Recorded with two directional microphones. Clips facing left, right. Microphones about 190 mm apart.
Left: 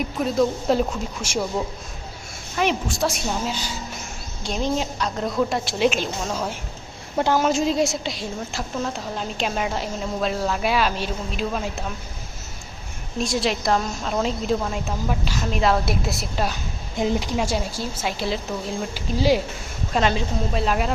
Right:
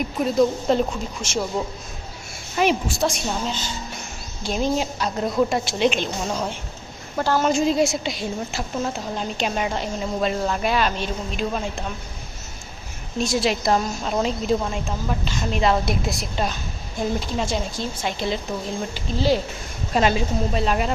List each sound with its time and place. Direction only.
0.2 s a woman's voice: centre (ahead or behind)
2.6 s a woman's voice: 5° right (ahead or behind)
3.1 s speech: 5° left (ahead or behind)
4.4 s a woman's voice: 5° right (ahead or behind)
7.2 s a woman's voice: 20° left (ahead or behind)
7.4 s a woman's voice: centre (ahead or behind)
13.1 s a woman's voice: centre (ahead or behind)
17.0 s speech: 15° left (ahead or behind)
19.9 s a woman's voice: 5° right (ahead or behind)